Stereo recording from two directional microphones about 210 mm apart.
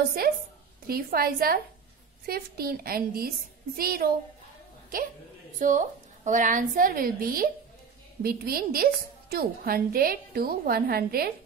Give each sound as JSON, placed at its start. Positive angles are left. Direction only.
{"t": 0.2, "sound": "a woman's voice", "side_deg": -45}
{"t": 5.6, "sound": "a woman's voice", "side_deg": -35}